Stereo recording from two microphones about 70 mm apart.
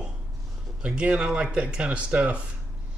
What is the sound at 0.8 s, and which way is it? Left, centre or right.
Speech, centre.